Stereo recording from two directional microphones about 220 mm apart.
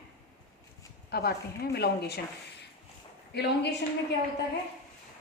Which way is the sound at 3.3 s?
50° left (ahead or behind).